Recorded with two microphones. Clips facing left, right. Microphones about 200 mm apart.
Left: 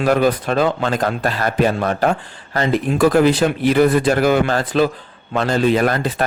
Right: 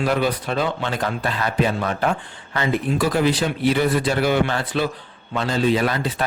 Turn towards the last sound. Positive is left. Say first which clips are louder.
# left 4 dB
turn(degrees=50)  # may be behind; listen again after turning